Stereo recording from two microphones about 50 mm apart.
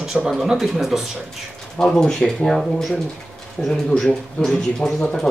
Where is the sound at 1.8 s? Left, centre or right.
Centre.